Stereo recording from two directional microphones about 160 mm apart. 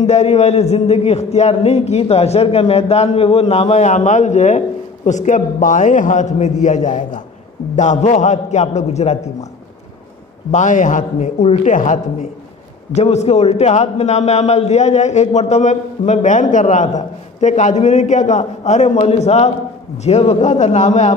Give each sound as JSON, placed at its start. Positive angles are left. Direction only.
{"t": 0.0, "sound": "a man's voice", "side_deg": 45}
{"t": 10.5, "sound": "a man's voice", "side_deg": 50}